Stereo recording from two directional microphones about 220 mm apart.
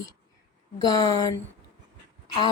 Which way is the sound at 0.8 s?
15° left (ahead or behind).